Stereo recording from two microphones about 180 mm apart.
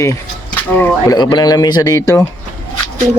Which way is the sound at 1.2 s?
25° left (ahead or behind).